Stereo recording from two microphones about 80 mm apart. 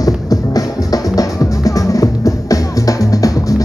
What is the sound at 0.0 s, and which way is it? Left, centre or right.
Music, left.